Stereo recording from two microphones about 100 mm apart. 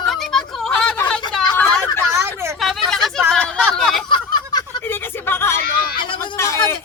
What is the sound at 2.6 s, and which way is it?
Hubbub, centre (ahead or behind).